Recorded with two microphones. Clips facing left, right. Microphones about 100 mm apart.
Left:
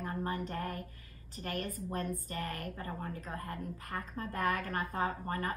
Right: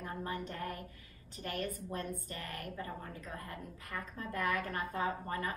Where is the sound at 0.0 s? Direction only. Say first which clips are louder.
Left 3 dB; 40° left (ahead or behind).